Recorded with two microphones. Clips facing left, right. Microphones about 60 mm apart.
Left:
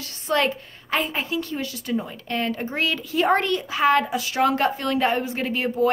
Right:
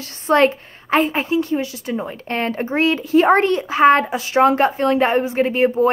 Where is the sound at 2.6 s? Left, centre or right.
Right.